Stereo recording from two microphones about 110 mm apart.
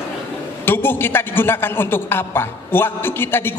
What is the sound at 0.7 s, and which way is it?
A man's voice, 20° left (ahead or behind).